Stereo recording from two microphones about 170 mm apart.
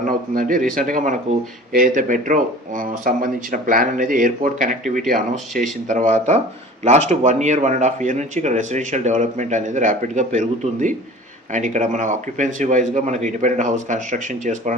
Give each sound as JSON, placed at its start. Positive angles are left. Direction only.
{"t": 0.0, "sound": "speech", "side_deg": -55}